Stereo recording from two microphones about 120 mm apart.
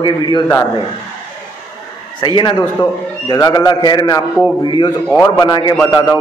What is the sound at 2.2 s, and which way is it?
A man's voice, 40° left (ahead or behind).